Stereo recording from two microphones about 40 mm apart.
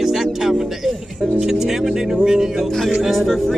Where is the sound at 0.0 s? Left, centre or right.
Centre.